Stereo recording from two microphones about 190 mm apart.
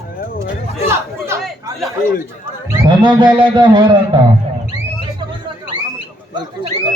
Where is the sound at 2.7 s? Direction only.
20° right (ahead or behind).